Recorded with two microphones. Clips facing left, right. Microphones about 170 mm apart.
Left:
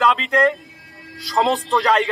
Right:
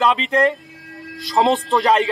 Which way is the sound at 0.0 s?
20° right (ahead or behind).